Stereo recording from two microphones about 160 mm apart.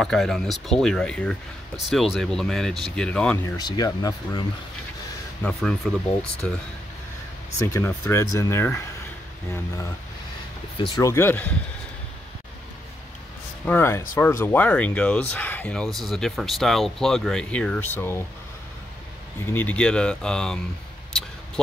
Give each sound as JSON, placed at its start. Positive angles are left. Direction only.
{"t": 0.0, "sound": "speech", "side_deg": 5}
{"t": 3.4, "sound": "speech", "side_deg": 25}
{"t": 5.4, "sound": "speech", "side_deg": 5}
{"t": 7.6, "sound": "speech", "side_deg": 15}
{"t": 10.8, "sound": "speech", "side_deg": 30}
{"t": 11.1, "sound": "speech", "side_deg": 15}
{"t": 13.7, "sound": "speech", "side_deg": 15}
{"t": 19.4, "sound": "speech", "side_deg": 10}